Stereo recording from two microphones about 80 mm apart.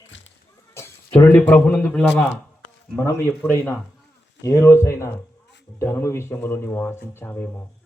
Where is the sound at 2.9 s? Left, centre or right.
Left.